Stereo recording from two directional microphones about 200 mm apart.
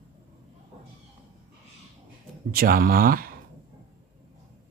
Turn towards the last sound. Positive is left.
turn(degrees=-45)  # may be behind; listen again after turning